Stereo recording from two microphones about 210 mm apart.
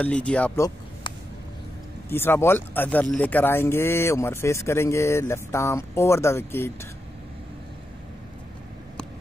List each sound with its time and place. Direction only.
0.0 s speech: 5° left (ahead or behind)
2.0 s speech: 10° left (ahead or behind)